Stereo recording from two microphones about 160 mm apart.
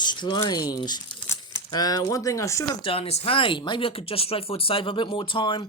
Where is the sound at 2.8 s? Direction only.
35° left (ahead or behind).